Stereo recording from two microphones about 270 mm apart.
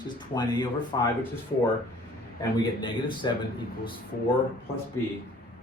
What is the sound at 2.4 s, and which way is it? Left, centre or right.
Speech, centre.